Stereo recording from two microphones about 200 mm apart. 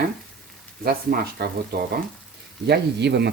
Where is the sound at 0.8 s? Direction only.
50° right (ahead or behind).